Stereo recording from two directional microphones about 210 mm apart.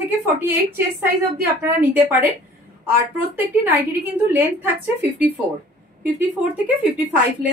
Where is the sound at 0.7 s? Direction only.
10° right (ahead or behind).